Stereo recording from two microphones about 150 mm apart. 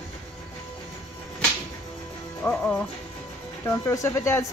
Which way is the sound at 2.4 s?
10° left (ahead or behind).